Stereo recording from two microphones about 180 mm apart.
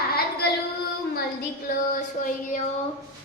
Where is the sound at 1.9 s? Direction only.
45° left (ahead or behind).